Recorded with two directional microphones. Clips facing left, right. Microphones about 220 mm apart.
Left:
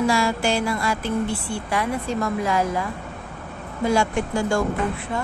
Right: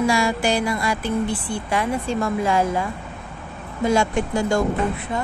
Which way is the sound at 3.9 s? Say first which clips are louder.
Right 1 dB; 20° right (ahead or behind).